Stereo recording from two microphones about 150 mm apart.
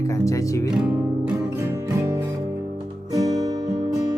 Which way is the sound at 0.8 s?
10° right (ahead or behind).